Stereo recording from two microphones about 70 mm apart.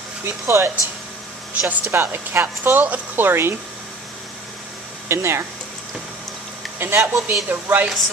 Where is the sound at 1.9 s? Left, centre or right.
Right.